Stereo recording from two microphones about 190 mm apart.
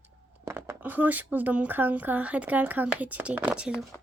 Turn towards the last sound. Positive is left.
turn(degrees=-5)  # may be behind; listen again after turning